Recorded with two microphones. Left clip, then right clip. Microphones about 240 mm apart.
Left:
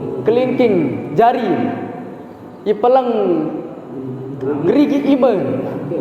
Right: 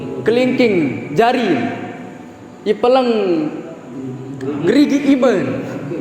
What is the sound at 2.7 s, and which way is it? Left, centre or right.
Speech, right.